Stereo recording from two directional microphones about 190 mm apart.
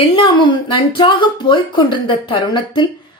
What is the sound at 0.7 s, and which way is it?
Speech, 25° left (ahead or behind).